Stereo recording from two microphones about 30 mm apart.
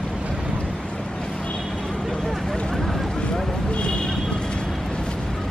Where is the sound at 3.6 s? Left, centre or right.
Left.